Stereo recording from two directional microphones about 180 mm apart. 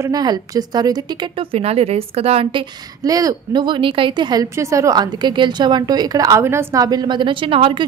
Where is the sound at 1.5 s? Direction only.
35° right (ahead or behind).